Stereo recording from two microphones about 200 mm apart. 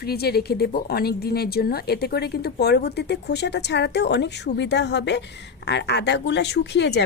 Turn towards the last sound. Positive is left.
turn(degrees=60)  # may be behind; listen again after turning